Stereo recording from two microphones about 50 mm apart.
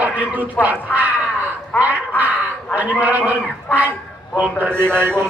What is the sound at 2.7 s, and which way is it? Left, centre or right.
Speech, right.